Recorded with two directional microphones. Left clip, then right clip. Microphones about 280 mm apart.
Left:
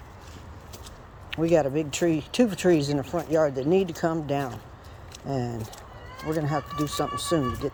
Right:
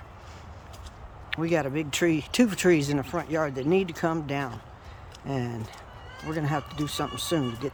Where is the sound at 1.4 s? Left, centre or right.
Right.